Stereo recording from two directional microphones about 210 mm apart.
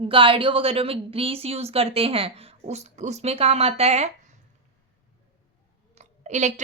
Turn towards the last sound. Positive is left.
turn(degrees=-35)  # may be behind; listen again after turning